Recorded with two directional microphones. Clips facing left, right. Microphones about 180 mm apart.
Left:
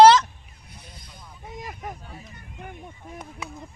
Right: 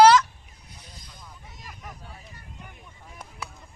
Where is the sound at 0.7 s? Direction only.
55° left (ahead or behind).